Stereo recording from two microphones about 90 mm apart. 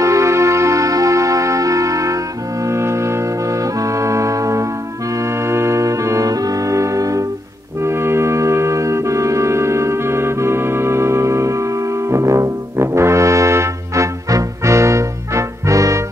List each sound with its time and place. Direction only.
0.0 s music: 35° right (ahead or behind)
7.8 s music: 30° right (ahead or behind)
12.1 s brass instrument: 35° right (ahead or behind)